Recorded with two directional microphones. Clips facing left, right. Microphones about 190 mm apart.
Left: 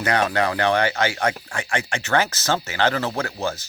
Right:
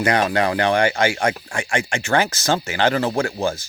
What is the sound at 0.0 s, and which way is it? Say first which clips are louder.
Speech: right 2 dB; 15° right (ahead or behind).